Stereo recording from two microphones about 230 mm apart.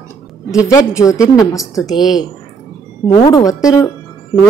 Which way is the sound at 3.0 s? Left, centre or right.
Centre.